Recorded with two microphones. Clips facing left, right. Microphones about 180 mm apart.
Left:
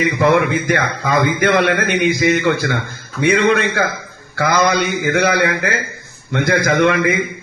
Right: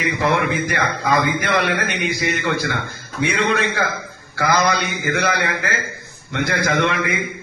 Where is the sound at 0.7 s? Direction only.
50° left (ahead or behind).